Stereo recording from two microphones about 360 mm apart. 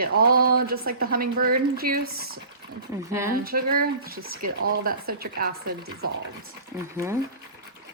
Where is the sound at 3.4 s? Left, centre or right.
Right.